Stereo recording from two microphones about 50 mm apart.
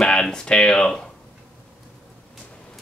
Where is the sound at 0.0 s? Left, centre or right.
Centre.